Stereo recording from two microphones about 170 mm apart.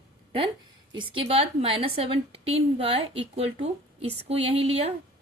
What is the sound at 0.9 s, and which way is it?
A woman's voice, 30° right (ahead or behind).